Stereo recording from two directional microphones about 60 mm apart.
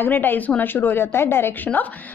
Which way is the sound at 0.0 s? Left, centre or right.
Left.